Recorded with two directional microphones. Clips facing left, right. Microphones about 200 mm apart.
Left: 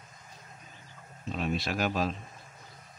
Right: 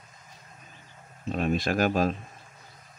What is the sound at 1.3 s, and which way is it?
Speech, 50° right (ahead or behind).